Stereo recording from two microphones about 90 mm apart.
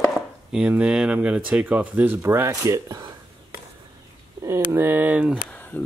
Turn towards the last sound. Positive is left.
turn(degrees=20)  # may be behind; listen again after turning